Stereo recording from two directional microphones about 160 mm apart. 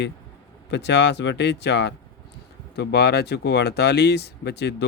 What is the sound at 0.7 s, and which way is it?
Speech, 90° left.